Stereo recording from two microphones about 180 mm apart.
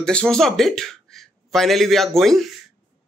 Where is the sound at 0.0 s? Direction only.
5° left (ahead or behind).